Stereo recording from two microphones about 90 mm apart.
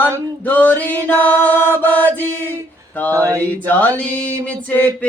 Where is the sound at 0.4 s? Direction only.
20° left (ahead or behind).